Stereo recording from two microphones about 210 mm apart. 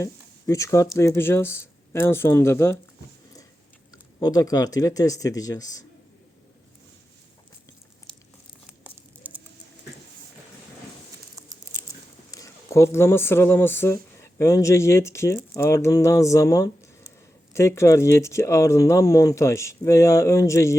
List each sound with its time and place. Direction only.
0.0 s speech: 15° left (ahead or behind)
4.2 s speech: 15° left (ahead or behind)
8.1 s crumpling: 5° left (ahead or behind)
8.6 s a sound: 10° right (ahead or behind)
11.4 s a sound: 15° right (ahead or behind)
12.3 s speech: 15° left (ahead or behind)